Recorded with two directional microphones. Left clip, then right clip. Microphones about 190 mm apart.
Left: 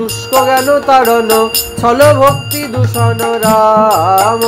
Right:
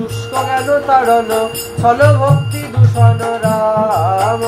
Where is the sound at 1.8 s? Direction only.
45° left (ahead or behind).